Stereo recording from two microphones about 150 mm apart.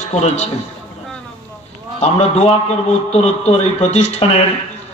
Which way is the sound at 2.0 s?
45° left (ahead or behind).